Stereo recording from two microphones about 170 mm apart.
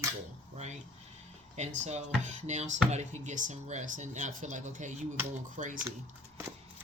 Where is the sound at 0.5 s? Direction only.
40° right (ahead or behind).